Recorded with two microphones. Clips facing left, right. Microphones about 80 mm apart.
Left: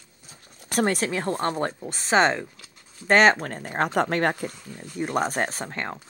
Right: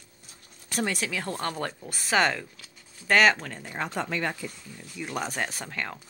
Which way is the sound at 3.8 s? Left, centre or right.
Left.